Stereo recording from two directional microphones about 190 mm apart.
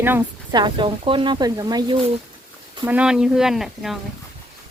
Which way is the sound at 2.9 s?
5° right (ahead or behind).